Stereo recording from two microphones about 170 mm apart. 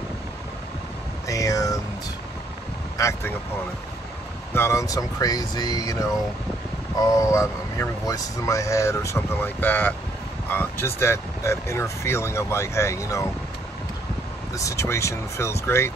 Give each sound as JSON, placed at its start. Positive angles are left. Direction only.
{"t": 1.2, "sound": "a sound", "side_deg": 20}
{"t": 3.0, "sound": "speech", "side_deg": 15}
{"t": 4.6, "sound": "speech", "side_deg": 15}
{"t": 7.1, "sound": "speech", "side_deg": 20}
{"t": 14.5, "sound": "speech", "side_deg": 20}